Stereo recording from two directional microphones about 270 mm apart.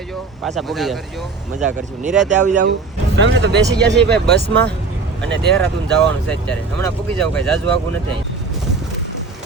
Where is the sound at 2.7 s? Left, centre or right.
Right.